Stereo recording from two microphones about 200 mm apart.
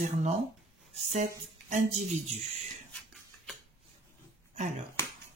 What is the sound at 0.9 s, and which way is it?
Speech, 35° right (ahead or behind).